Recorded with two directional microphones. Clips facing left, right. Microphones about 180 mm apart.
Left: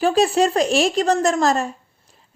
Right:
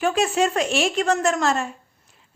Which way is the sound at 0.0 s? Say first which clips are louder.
Left 4 dB; 35° left (ahead or behind).